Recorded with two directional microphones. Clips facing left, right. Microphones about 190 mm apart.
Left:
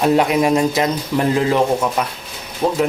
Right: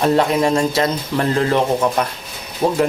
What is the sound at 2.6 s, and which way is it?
Speech, 10° right (ahead or behind).